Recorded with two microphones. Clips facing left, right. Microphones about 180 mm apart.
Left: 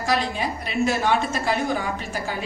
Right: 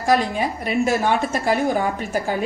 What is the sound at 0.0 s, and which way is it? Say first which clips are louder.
A woman's voice: right 5 dB; 50° right (ahead or behind).